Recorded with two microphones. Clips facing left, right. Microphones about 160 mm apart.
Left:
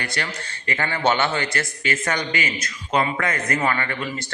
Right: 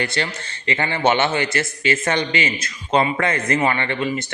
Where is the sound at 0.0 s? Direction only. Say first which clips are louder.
Right 5 dB; 25° right (ahead or behind).